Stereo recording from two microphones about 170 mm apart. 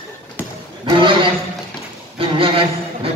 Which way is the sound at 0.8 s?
30° right (ahead or behind).